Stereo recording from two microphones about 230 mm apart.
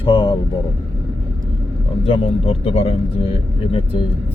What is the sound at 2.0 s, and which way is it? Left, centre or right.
Speech, left.